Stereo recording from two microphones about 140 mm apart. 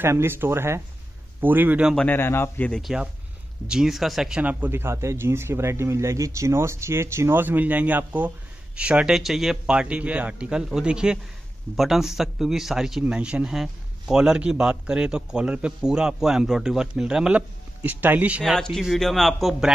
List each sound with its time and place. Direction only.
0.0 s speech: 15° right (ahead or behind)
2.0 s a man's voice: 15° left (ahead or behind)
2.8 s a man's voice: 5° right (ahead or behind)
18.4 s a man's voice: centre (ahead or behind)